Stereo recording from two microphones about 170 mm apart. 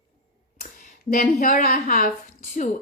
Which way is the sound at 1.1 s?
55° left (ahead or behind).